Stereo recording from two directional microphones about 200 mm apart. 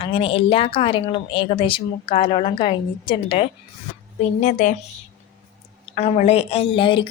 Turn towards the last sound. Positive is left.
turn(degrees=25)  # may be behind; listen again after turning